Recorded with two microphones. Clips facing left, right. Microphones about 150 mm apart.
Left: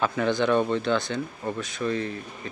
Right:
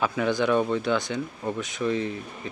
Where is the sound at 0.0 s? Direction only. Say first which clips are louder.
Even; 10° right (ahead or behind).